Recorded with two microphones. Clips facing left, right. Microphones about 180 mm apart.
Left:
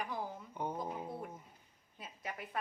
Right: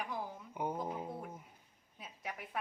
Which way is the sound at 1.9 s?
Centre (ahead or behind).